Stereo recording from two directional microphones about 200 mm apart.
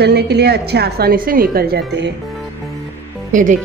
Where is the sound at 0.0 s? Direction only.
55° right (ahead or behind).